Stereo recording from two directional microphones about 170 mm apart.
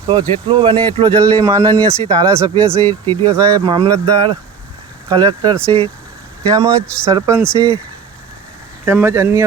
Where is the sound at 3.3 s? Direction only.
20° right (ahead or behind).